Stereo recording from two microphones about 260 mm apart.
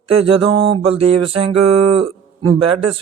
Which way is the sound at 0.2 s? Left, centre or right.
Right.